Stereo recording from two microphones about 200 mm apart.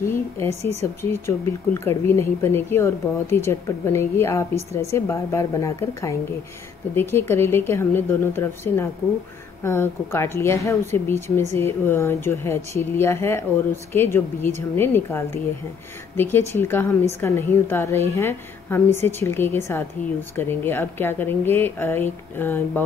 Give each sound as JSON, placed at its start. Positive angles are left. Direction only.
{"t": 0.0, "sound": "a woman's voice", "side_deg": 15}
{"t": 0.5, "sound": "a woman's voice", "side_deg": -30}
{"t": 1.1, "sound": "a woman's voice", "side_deg": 10}